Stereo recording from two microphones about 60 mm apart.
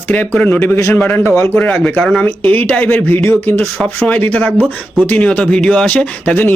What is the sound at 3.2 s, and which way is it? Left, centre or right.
Speech, left.